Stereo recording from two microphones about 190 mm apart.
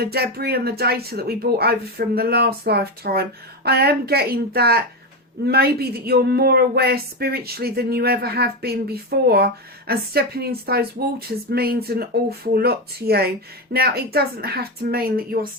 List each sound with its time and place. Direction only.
0.0 s a woman's voice: 55° right (ahead or behind)